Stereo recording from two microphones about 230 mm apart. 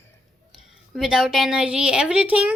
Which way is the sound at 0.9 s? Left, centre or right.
Centre.